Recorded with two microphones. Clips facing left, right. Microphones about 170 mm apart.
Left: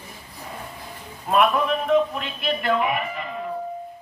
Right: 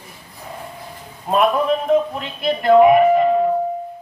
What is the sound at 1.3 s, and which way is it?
A man's voice, 30° right (ahead or behind).